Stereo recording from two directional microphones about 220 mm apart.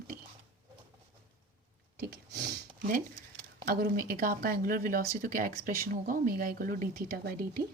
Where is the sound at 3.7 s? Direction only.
40° right (ahead or behind).